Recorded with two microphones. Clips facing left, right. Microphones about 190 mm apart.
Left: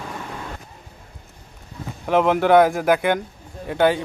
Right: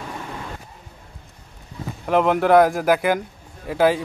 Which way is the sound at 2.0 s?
Centre (ahead or behind).